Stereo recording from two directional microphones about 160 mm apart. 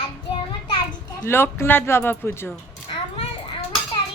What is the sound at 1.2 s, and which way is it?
Speech, 15° left (ahead or behind).